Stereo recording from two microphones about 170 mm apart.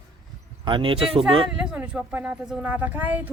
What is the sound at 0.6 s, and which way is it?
Speech, 30° right (ahead or behind).